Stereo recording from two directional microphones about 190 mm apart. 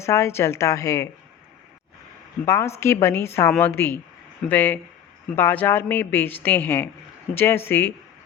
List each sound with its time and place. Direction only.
0.0 s a woman's voice: 15° left (ahead or behind)
2.4 s a woman's voice: 15° left (ahead or behind)